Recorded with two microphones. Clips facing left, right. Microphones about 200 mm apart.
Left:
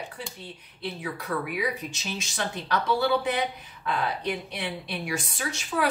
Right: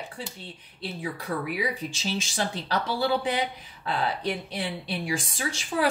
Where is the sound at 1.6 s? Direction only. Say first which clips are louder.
Right 1 dB; 30° right (ahead or behind).